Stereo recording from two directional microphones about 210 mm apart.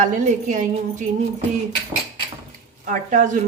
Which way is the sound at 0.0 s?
35° right (ahead or behind).